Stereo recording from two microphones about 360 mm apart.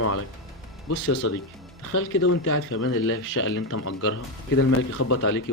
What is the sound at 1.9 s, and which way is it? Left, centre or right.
Speech, left.